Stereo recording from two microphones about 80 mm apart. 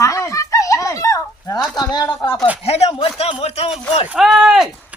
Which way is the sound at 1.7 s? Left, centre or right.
Left.